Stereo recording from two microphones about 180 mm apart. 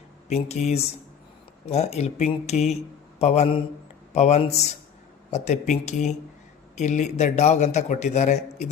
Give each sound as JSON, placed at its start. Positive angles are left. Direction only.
{"t": 0.3, "sound": "a man's voice", "side_deg": 35}